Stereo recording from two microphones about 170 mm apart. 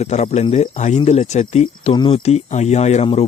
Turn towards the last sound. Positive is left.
turn(degrees=40)  # may be behind; listen again after turning